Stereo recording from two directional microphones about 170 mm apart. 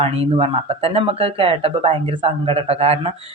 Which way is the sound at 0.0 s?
35° right (ahead or behind).